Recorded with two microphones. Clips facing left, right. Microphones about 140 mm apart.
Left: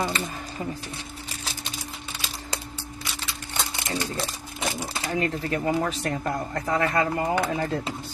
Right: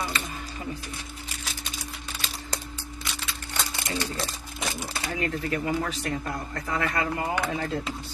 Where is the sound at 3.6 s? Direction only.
25° left (ahead or behind).